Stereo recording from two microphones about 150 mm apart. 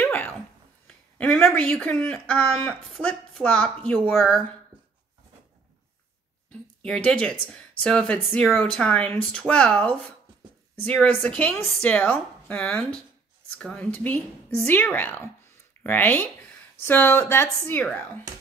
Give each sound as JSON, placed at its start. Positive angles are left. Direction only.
{"t": 0.0, "sound": "a sound", "side_deg": 10}
{"t": 0.8, "sound": "speech", "side_deg": 5}
{"t": 6.5, "sound": "speech", "side_deg": 5}